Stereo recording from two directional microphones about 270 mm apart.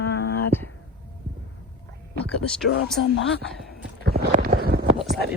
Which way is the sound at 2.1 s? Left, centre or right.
Centre.